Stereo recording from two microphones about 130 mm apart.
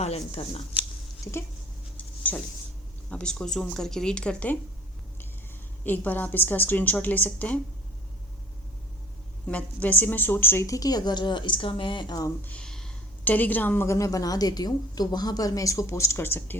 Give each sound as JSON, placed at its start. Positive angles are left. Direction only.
{"t": 0.0, "sound": "speech", "side_deg": 50}
{"t": 1.2, "sound": "speech", "side_deg": 20}
{"t": 2.0, "sound": "a sound", "side_deg": 10}
{"t": 3.1, "sound": "a woman's voice", "side_deg": 5}
{"t": 5.8, "sound": "a woman's voice", "side_deg": 15}
{"t": 9.5, "sound": "a woman's voice", "side_deg": 10}
{"t": 12.4, "sound": "a sound", "side_deg": 10}
{"t": 13.2, "sound": "a woman's voice", "side_deg": 15}